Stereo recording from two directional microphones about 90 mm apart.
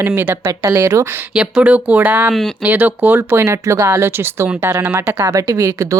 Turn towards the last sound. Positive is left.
turn(degrees=-35)  # may be behind; listen again after turning